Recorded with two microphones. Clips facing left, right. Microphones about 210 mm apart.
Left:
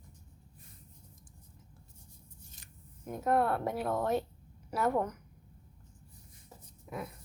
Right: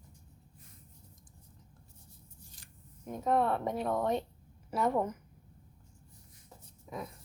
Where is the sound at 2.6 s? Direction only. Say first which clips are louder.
Left 1 dB; 20° left (ahead or behind).